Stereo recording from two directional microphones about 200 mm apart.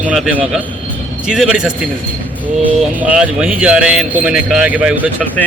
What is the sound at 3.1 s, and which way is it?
Speech, 5° right (ahead or behind).